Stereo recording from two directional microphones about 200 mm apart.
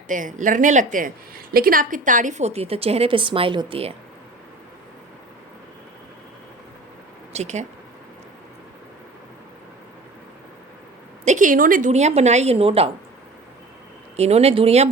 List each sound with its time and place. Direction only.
0.1 s a woman's voice: 40° right (ahead or behind)
7.3 s a woman's voice: 35° right (ahead or behind)
11.3 s a woman's voice: 40° right (ahead or behind)
14.2 s a woman's voice: 30° right (ahead or behind)